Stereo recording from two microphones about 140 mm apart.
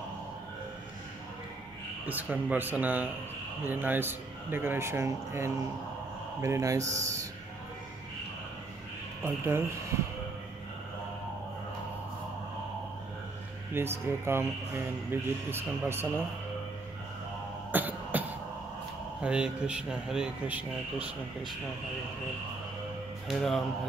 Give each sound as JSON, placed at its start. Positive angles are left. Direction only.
{"t": 2.0, "sound": "speech", "side_deg": -10}
{"t": 9.2, "sound": "speech", "side_deg": -15}
{"t": 13.7, "sound": "speech", "side_deg": -15}
{"t": 17.6, "sound": "cough", "side_deg": -10}
{"t": 19.2, "sound": "speech", "side_deg": -5}
{"t": 23.2, "sound": "speech", "side_deg": 0}